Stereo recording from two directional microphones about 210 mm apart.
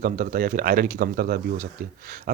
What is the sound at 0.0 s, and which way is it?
Speech, 45° right (ahead or behind).